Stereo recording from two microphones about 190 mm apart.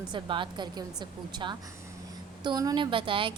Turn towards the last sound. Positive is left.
turn(degrees=-25)  # may be behind; listen again after turning